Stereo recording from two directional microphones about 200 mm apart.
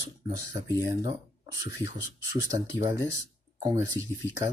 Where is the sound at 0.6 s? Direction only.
20° right (ahead or behind).